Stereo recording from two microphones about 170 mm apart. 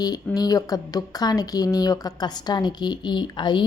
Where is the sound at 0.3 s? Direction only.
20° left (ahead or behind).